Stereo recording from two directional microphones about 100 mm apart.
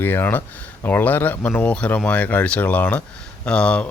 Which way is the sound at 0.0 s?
20° left (ahead or behind).